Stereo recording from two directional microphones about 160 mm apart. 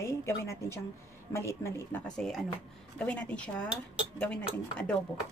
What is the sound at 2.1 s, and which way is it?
A woman's voice, centre (ahead or behind).